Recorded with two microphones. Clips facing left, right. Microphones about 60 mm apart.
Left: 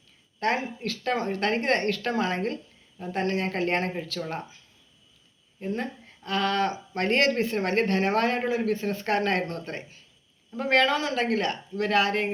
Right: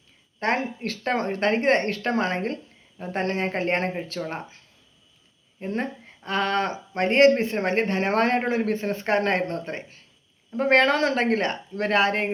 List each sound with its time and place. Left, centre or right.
0.3 s speech: right
5.5 s speech: right
11.2 s speech: right